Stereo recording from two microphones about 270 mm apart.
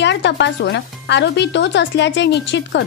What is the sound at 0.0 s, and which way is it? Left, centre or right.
Speech, left.